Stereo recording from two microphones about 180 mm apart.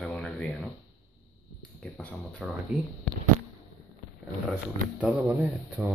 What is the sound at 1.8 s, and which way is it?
Speech, 10° left (ahead or behind).